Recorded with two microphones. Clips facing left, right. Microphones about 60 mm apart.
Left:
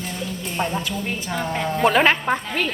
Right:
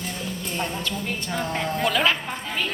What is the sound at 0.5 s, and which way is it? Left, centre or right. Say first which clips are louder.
Speech: left 5 dB; centre.